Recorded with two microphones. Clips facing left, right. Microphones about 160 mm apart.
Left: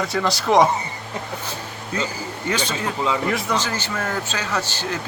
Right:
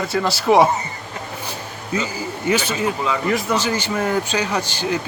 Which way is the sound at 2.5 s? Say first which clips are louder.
Right 4 dB; 10° right (ahead or behind).